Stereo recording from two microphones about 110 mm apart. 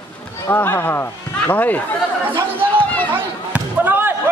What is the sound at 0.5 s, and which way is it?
Speech, 20° left (ahead or behind).